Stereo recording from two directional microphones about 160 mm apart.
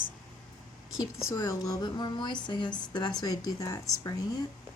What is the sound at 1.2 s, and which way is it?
A woman's voice, 20° left (ahead or behind).